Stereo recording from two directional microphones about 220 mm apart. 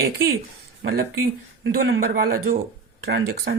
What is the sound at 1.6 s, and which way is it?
Speech, 45° right (ahead or behind).